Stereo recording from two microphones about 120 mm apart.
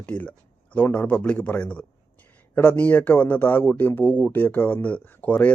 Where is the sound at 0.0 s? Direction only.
10° left (ahead or behind).